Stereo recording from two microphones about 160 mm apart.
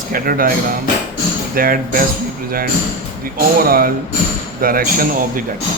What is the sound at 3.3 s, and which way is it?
A man's voice, 65° right (ahead or behind).